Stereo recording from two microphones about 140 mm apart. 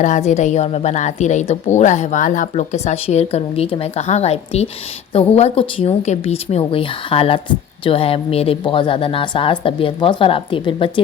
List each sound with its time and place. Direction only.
0.0 s a woman's voice: 60° left (ahead or behind); by 11.0 s 35° left (ahead or behind)